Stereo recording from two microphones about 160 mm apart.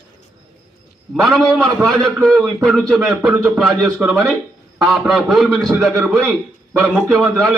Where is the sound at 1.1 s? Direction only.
Centre (ahead or behind).